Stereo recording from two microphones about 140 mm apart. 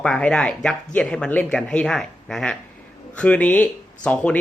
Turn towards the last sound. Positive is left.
turn(degrees=10)  # may be behind; listen again after turning